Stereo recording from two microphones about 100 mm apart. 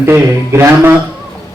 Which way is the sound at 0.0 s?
25° right (ahead or behind).